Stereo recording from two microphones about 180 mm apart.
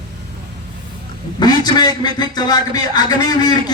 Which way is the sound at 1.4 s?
20° left (ahead or behind).